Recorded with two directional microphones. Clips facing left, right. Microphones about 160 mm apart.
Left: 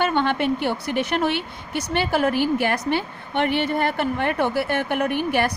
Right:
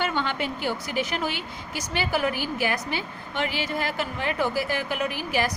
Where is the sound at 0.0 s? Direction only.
60° left (ahead or behind).